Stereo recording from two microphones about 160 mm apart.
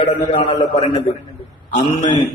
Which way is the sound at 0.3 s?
30° left (ahead or behind).